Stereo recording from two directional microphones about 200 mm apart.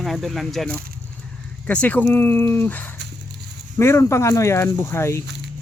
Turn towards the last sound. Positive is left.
turn(degrees=15)  # may be behind; listen again after turning